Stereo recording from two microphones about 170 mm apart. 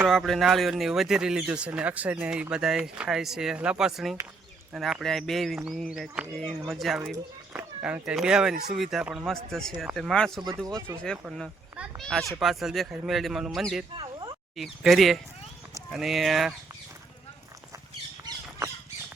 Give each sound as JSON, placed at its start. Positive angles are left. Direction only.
{"t": 0.1, "sound": "speech", "side_deg": 0}
{"t": 13.9, "sound": "a sound", "side_deg": -30}
{"t": 14.5, "sound": "speech", "side_deg": 0}